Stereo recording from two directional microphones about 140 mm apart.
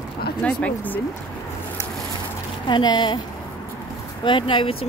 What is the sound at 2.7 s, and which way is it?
Speech, 35° left (ahead or behind).